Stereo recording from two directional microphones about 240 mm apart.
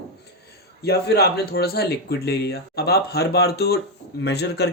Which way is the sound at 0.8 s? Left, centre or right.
Left.